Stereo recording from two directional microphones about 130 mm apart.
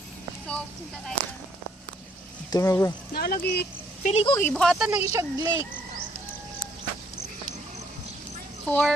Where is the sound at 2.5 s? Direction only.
25° left (ahead or behind).